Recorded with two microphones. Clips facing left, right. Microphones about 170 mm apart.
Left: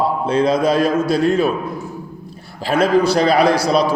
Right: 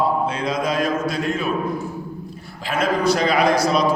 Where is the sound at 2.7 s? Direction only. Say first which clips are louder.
Left 5 dB; 30° left (ahead or behind).